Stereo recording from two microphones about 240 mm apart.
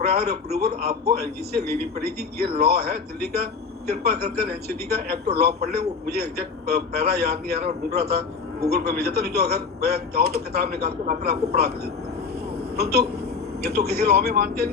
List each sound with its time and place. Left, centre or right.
0.1 s speech: right
12.7 s speech: right